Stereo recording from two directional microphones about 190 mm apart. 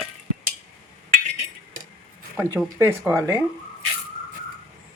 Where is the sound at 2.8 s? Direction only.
10° right (ahead or behind).